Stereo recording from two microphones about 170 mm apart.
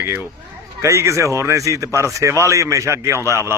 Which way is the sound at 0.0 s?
15° right (ahead or behind).